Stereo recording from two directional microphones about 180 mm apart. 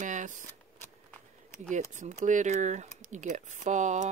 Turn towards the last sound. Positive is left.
turn(degrees=-40)  # may be behind; listen again after turning